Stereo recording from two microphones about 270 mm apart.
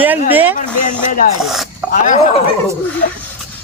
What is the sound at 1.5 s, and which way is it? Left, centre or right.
Roaring cats, centre.